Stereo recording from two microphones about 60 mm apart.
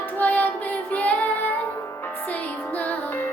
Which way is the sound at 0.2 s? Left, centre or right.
Left.